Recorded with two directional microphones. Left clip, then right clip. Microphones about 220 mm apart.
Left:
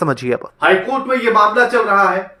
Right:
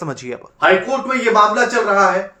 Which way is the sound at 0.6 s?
10° right (ahead or behind).